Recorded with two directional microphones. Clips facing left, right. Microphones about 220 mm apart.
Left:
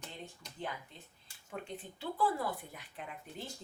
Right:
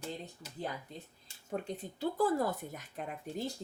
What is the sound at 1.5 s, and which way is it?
Speech, 40° right (ahead or behind).